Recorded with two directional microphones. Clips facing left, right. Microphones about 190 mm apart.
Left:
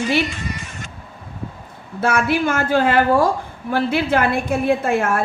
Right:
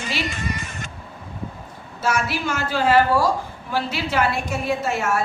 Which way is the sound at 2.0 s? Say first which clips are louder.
Left 5 dB; 55° left (ahead or behind).